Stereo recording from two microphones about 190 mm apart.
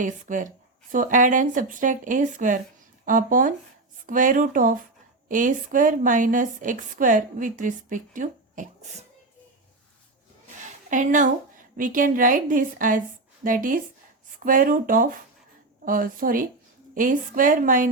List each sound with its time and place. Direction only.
0.0 s a woman's voice: 45° right (ahead or behind)
10.8 s a woman's voice: 40° right (ahead or behind)